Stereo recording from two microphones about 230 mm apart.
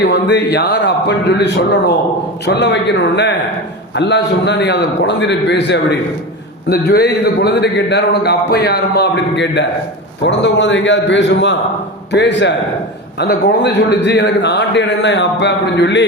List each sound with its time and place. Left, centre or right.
0.1 s a man's voice: left